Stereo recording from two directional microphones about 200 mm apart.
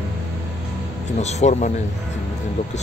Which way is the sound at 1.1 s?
35° left (ahead or behind).